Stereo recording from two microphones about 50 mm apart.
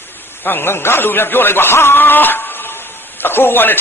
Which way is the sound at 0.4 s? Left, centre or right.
Left.